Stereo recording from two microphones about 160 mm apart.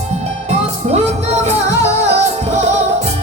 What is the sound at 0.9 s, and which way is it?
Music, 45° right (ahead or behind).